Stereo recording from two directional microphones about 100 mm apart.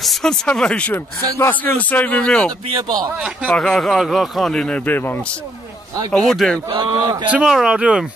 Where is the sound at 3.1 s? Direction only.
10° right (ahead or behind).